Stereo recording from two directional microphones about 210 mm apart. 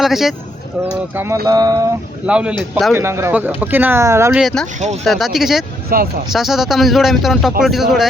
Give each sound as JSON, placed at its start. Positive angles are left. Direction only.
{"t": 0.0, "sound": "speech", "side_deg": 0}
{"t": 2.2, "sound": "speech", "side_deg": -5}
{"t": 5.9, "sound": "speech", "side_deg": -45}
{"t": 6.3, "sound": "speech", "side_deg": 0}